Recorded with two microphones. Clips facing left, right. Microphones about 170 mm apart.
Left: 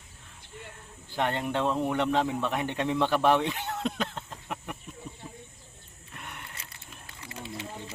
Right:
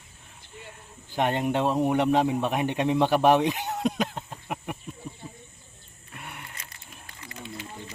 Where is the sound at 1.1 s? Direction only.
20° right (ahead or behind).